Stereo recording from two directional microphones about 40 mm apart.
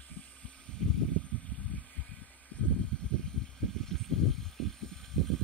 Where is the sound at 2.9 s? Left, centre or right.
Left.